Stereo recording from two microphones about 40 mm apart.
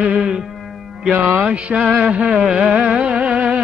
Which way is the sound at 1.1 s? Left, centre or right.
Right.